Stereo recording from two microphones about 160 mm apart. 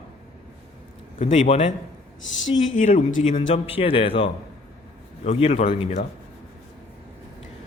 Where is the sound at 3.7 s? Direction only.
35° left (ahead or behind).